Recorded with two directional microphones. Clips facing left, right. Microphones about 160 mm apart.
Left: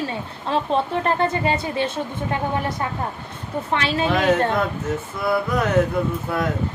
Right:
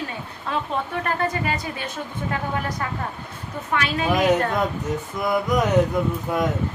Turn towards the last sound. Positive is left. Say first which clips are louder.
# even
turn(degrees=-15)  # may be behind; listen again after turning